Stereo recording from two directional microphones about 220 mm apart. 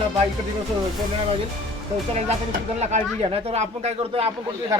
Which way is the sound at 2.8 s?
30° right (ahead or behind).